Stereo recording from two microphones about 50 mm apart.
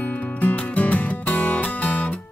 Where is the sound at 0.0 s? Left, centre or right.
Left.